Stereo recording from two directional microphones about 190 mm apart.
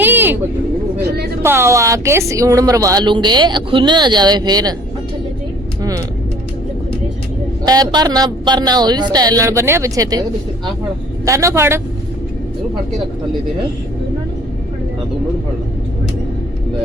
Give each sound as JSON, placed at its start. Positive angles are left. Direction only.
{"t": 0.0, "sound": "vehicle", "side_deg": -10}
{"t": 0.9, "sound": "speech", "side_deg": -55}
{"t": 1.4, "sound": "speech", "side_deg": -15}
{"t": 7.6, "sound": "speech", "side_deg": -20}
{"t": 11.3, "sound": "a man's voice", "side_deg": -15}